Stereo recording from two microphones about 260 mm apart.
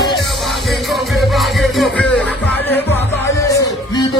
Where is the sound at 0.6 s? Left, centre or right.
Centre.